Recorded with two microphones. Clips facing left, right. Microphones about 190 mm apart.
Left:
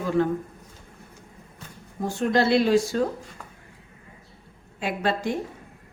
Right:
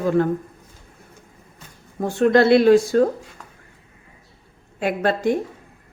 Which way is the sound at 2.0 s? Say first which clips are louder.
Right 7 dB; 60° right (ahead or behind).